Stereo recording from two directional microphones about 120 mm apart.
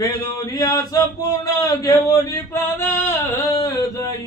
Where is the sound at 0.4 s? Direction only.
30° left (ahead or behind).